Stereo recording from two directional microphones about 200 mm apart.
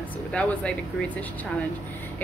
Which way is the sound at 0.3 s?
5° left (ahead or behind).